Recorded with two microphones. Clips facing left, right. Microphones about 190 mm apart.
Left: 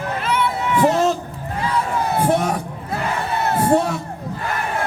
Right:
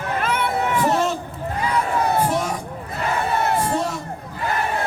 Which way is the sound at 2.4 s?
65° left (ahead or behind).